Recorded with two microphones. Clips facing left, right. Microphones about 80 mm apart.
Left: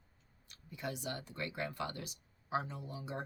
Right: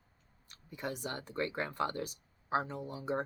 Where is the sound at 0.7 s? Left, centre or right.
Right.